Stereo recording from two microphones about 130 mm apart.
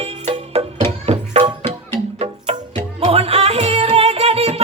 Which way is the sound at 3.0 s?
50° right (ahead or behind).